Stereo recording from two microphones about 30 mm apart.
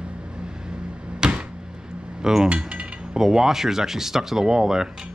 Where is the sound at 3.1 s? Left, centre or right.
Centre.